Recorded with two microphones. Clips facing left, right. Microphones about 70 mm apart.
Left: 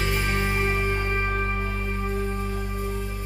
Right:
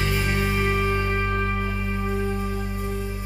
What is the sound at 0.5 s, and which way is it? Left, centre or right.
Music, left.